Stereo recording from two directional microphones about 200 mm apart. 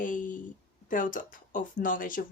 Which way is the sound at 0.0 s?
40° left (ahead or behind).